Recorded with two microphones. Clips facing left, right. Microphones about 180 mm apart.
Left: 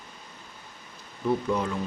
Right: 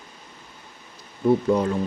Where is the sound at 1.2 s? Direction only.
35° right (ahead or behind).